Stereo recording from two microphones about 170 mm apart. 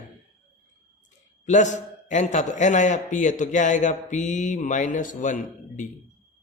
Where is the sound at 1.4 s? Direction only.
45° left (ahead or behind).